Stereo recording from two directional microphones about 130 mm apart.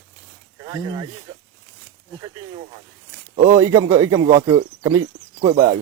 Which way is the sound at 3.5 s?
25° right (ahead or behind).